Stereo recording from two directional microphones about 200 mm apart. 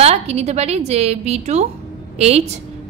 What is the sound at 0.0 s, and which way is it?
A woman's voice, 30° right (ahead or behind).